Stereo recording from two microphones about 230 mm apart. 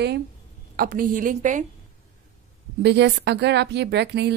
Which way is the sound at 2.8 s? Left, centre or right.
Right.